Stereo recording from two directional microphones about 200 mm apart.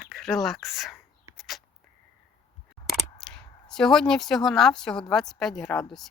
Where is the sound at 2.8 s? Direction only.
Centre (ahead or behind).